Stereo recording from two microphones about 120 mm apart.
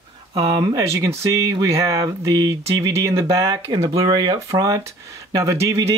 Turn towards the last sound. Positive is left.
turn(degrees=-25)  # may be behind; listen again after turning